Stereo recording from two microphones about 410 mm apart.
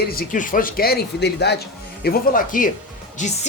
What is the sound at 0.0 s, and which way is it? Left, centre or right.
Speech, left.